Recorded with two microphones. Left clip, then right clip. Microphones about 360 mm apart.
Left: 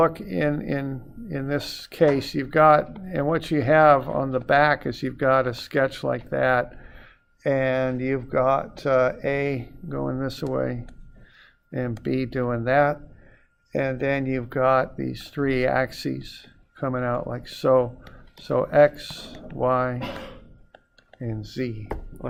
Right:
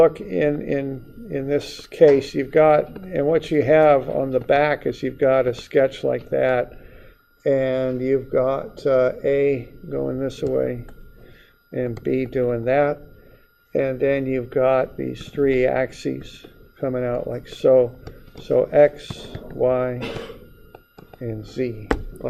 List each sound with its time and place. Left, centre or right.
0.0 s speech: left
7.4 s speech: left
13.7 s speech: left